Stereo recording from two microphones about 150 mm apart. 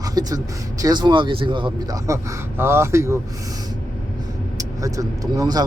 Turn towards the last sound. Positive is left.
turn(degrees=-25)  # may be behind; listen again after turning